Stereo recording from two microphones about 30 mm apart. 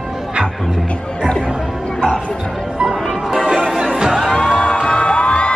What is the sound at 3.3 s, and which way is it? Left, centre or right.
Music, centre.